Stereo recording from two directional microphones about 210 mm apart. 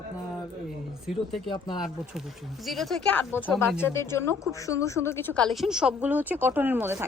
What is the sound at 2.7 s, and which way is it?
A woman's voice, centre (ahead or behind).